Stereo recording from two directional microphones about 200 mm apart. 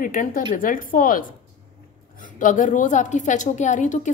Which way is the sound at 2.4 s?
40° left (ahead or behind).